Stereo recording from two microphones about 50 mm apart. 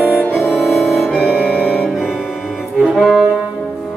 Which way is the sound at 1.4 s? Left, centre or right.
Left.